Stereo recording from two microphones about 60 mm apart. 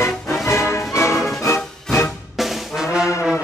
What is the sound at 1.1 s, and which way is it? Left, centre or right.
Music, centre.